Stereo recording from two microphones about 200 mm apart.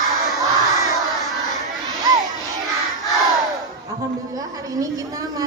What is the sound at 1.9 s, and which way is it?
Crowd, 20° right (ahead or behind).